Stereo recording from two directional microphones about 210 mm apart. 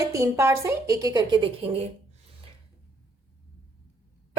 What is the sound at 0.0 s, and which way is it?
Speech, 15° right (ahead or behind).